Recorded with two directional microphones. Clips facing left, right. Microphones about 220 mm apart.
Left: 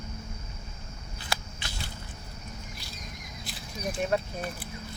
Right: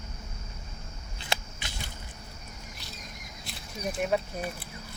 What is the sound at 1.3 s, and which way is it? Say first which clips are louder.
Walk: right 1 dB; 20° right (ahead or behind).